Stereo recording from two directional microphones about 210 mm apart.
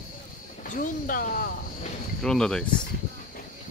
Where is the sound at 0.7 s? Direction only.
40° left (ahead or behind).